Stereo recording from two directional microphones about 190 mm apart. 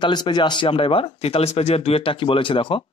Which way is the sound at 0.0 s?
25° left (ahead or behind).